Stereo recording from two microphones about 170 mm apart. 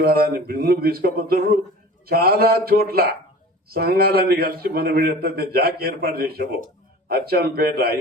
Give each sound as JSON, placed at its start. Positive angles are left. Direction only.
{"t": 0.0, "sound": "a man's voice", "side_deg": -60}